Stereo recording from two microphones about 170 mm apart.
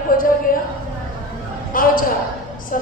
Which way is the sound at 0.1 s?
55° left (ahead or behind).